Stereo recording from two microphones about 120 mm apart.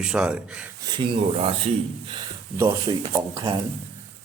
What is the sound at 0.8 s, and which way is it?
Speech, 45° right (ahead or behind).